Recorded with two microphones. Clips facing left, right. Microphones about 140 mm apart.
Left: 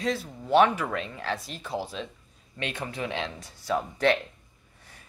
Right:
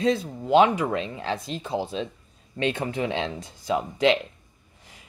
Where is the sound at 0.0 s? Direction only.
25° right (ahead or behind).